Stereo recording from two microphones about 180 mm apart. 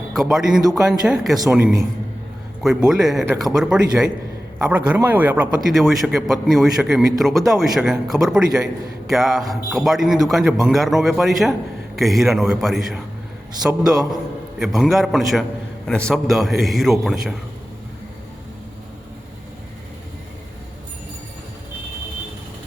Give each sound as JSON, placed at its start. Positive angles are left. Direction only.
{"t": 0.1, "sound": "a man's voice", "side_deg": 0}
{"t": 1.4, "sound": "a man's voice", "side_deg": -15}
{"t": 3.2, "sound": "speech", "side_deg": -20}
{"t": 3.5, "sound": "a man's voice", "side_deg": -5}